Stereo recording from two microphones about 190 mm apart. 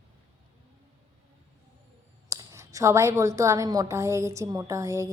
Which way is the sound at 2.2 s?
15° right (ahead or behind).